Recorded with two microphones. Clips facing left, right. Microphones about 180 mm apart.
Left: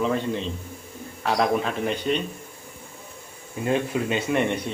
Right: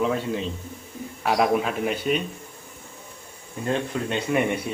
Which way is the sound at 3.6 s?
10° left (ahead or behind).